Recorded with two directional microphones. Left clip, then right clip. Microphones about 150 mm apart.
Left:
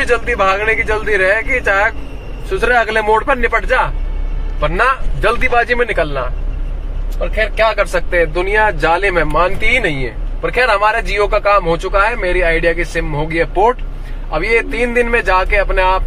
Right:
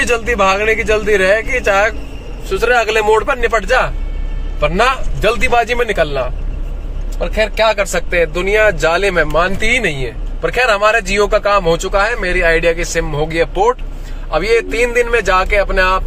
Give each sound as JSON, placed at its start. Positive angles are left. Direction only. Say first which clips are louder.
{"t": 0.0, "sound": "speech", "louder": "even", "side_deg": -25}
{"t": 5.2, "sound": "speech", "louder": "right 1 dB", "side_deg": -20}
{"t": 7.3, "sound": "speech", "louder": "right 1 dB", "side_deg": -25}